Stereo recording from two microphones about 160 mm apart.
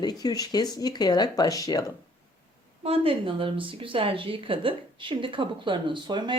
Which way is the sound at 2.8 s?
35° right (ahead or behind).